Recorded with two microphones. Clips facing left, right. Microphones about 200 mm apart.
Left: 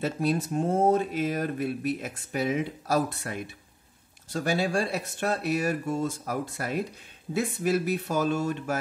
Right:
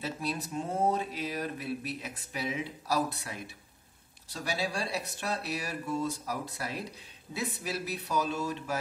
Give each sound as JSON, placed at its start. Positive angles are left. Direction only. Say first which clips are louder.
{"t": 0.0, "sound": "speech", "louder": "left 8 dB", "side_deg": 50}